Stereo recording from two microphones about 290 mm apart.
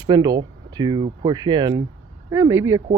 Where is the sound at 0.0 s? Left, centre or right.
Centre.